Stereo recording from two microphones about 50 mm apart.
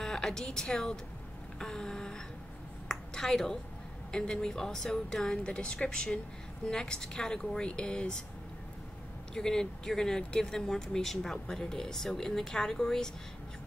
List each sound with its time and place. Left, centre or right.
0.0 s speech: centre
2.9 s a sound: centre
4.1 s speech: centre
9.3 s speech: centre